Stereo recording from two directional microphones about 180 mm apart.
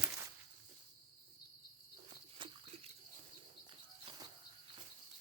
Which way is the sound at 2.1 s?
25° right (ahead or behind).